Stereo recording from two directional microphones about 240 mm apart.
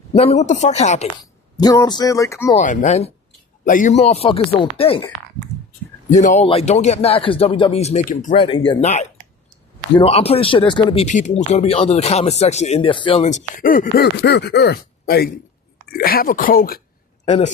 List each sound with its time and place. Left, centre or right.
0.2 s speech: left
1.2 s speech: centre
2.6 s speech: left
6.1 s speech: left
8.4 s speech: left
17.2 s speech: left